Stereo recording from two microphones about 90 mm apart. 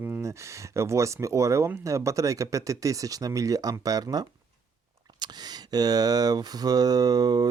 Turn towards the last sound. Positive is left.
turn(degrees=-45)  # may be behind; listen again after turning